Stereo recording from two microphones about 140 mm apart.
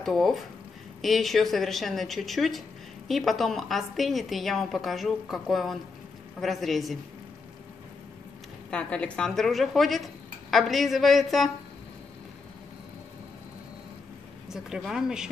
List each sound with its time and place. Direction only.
0.0 s a woman's voice: centre (ahead or behind)
8.6 s a woman's voice: 10° left (ahead or behind)
14.5 s a woman's voice: centre (ahead or behind)